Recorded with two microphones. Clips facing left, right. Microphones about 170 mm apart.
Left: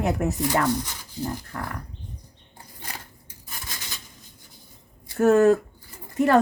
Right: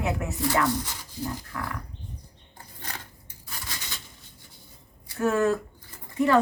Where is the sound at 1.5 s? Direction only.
40° left (ahead or behind).